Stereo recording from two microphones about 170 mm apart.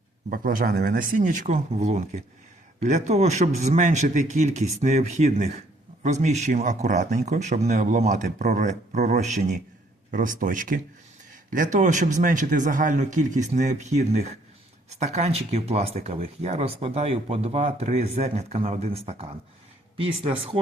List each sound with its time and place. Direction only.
0.3 s speech: 60° right (ahead or behind); by 20.6 s 35° right (ahead or behind)